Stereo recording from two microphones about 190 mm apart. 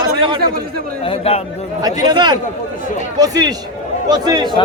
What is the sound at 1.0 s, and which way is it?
Chatter, 30° left (ahead or behind).